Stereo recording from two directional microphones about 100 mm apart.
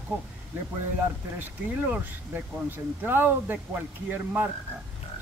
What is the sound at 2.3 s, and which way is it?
Speech, 20° right (ahead or behind).